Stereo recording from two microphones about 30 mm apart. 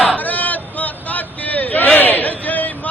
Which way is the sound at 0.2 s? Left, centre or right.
Left.